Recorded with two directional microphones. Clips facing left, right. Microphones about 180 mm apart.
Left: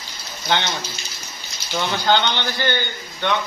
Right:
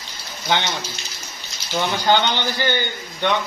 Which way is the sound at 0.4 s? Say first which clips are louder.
Even; 10° right (ahead or behind).